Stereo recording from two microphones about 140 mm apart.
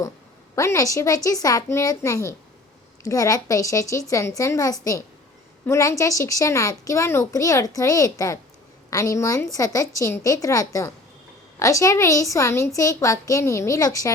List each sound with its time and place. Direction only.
0.5 s a woman's voice: 20° left (ahead or behind)